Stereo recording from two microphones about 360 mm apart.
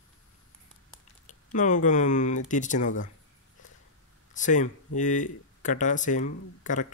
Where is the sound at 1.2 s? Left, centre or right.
Left.